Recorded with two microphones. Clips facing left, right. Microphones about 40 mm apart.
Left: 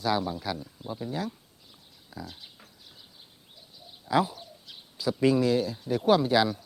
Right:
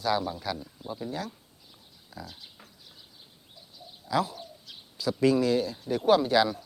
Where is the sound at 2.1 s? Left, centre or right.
Centre.